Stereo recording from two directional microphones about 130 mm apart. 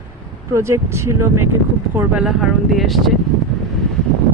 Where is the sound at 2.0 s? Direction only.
10° right (ahead or behind).